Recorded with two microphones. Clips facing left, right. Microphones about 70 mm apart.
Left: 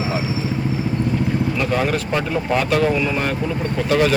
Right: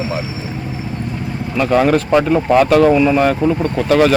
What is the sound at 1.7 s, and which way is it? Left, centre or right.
Speech, right.